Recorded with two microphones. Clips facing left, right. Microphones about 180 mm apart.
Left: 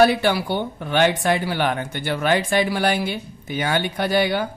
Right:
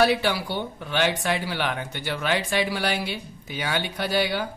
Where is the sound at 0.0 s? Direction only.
50° left (ahead or behind).